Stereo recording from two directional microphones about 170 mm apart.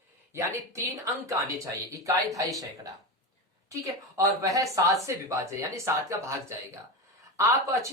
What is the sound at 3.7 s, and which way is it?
A woman's voice, 20° right (ahead or behind).